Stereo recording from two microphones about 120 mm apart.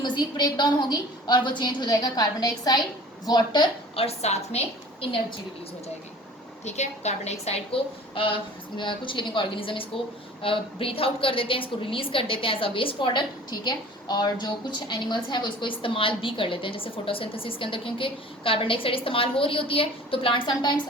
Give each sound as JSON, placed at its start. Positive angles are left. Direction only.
{"t": 0.0, "sound": "a woman's voice", "side_deg": 40}
{"t": 3.9, "sound": "a woman's voice", "side_deg": 60}
{"t": 6.7, "sound": "a woman's voice", "side_deg": 70}